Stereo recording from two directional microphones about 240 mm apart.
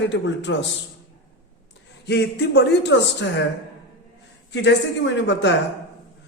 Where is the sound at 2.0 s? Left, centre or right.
Left.